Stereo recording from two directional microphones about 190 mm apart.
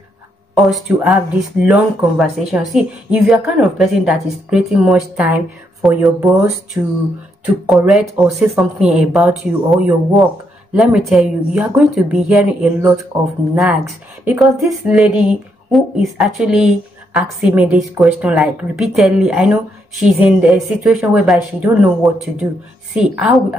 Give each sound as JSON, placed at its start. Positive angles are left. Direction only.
{"t": 0.6, "sound": "speech", "side_deg": -5}
{"t": 14.2, "sound": "speech", "side_deg": -5}